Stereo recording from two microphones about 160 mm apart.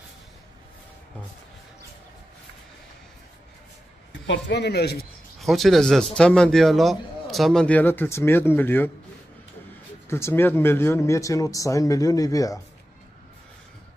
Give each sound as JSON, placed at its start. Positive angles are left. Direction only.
{"t": 4.5, "sound": "speech", "side_deg": 90}
{"t": 5.4, "sound": "a man's voice", "side_deg": 0}
{"t": 10.0, "sound": "speech", "side_deg": 15}